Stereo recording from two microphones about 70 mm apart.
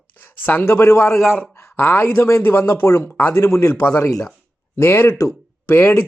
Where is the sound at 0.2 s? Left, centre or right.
Left.